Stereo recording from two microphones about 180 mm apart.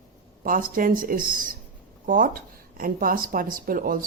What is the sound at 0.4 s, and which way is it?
Speech, 50° right (ahead or behind).